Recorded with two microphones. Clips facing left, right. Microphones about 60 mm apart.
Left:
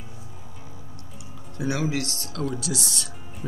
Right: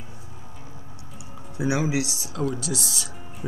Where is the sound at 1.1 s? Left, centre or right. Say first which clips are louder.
Right 3 dB; centre.